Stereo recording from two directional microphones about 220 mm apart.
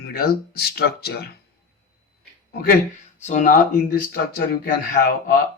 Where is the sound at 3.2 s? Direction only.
35° left (ahead or behind).